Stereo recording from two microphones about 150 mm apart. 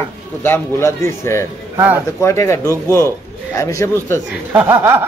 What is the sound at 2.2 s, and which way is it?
A man's voice, 20° left (ahead or behind).